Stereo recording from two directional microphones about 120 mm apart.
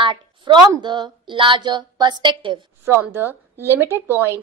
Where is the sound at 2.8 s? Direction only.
20° right (ahead or behind).